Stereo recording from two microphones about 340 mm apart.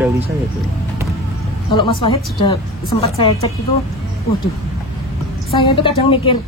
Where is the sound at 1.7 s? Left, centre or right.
Centre.